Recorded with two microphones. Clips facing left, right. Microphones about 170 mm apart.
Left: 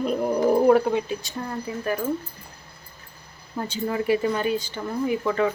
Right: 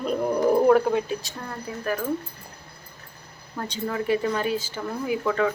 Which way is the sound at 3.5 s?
10° left (ahead or behind).